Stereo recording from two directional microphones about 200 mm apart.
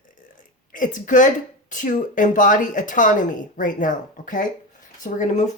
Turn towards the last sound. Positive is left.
turn(degrees=40)  # may be behind; listen again after turning